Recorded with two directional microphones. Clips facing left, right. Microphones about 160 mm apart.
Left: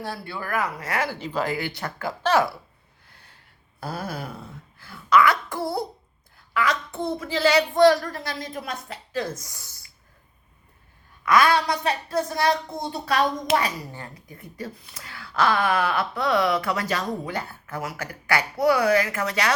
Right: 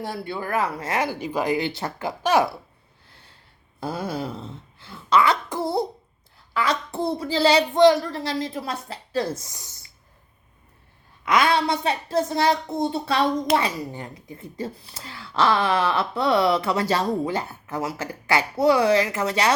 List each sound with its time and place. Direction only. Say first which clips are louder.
0.0 s speech: right 3 dB; 20° right (ahead or behind)
3.8 s speech: right 4 dB; 25° right (ahead or behind)
11.3 s speech: left 1 dB; 25° right (ahead or behind)